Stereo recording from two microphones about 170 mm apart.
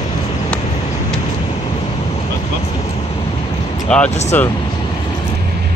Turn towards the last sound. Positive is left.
turn(degrees=40)  # may be behind; listen again after turning